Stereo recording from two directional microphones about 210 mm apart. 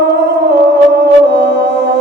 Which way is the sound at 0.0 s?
55° right (ahead or behind).